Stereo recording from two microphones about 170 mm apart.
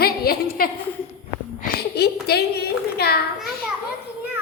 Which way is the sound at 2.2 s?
70° left (ahead or behind).